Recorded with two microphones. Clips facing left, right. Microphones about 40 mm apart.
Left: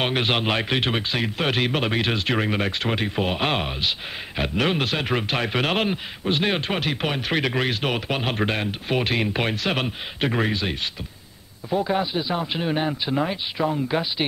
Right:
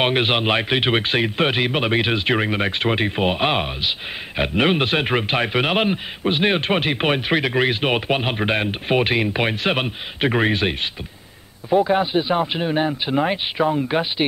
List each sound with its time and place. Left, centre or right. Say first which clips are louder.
0.0 s speech: right 4 dB; right
0.9 s speech: right 6 dB; right; by 3.9 s centre
4.4 s speech: right 4 dB; right
7.3 s speech: right 2 dB; centre
7.7 s speech: right 5 dB; right
9.1 s speech: right 3 dB; centre
10.4 s speech: right 5 dB; right
11.8 s speech: right 5 dB; right
12.5 s speech: right 3 dB; centre
13.0 s speech: right 4 dB; right